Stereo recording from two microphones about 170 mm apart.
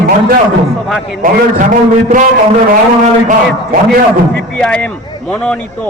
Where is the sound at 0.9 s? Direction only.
Centre (ahead or behind).